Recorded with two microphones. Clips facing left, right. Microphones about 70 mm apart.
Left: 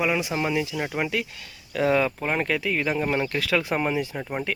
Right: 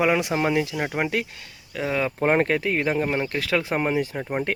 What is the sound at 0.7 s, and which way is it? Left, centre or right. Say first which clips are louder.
Speech: right 2 dB; right.